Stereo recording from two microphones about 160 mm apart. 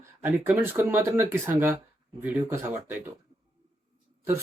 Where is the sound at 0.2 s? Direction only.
15° right (ahead or behind).